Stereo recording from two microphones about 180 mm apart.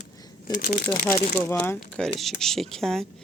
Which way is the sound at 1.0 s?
50° left (ahead or behind).